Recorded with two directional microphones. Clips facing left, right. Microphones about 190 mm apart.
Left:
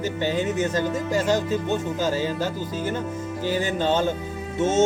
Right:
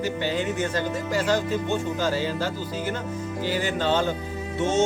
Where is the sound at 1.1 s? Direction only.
20° left (ahead or behind).